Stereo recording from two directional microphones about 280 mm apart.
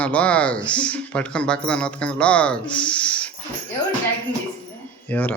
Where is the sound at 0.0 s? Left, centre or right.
Centre.